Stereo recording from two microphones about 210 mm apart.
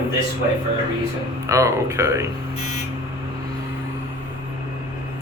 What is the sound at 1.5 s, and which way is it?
Speech, 15° right (ahead or behind).